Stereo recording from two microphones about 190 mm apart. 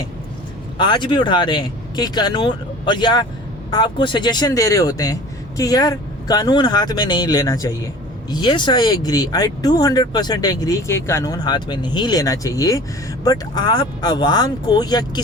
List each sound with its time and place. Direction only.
0.8 s speech: 25° left (ahead or behind)